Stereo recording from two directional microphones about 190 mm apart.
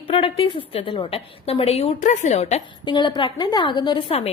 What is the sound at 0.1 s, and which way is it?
A woman's voice, 25° left (ahead or behind).